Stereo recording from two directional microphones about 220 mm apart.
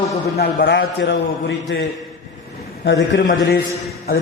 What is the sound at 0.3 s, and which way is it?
A man's voice, 45° left (ahead or behind).